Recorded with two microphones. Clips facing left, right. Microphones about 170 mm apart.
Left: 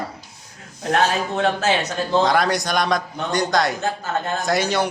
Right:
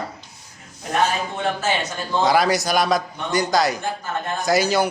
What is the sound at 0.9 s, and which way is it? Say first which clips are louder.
Speech: left 2 dB; 80° left.